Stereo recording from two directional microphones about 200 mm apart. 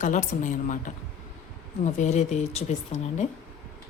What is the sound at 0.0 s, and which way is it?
Speech, 40° left (ahead or behind).